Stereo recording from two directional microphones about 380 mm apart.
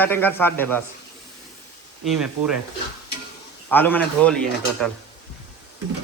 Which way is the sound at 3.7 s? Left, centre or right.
Centre.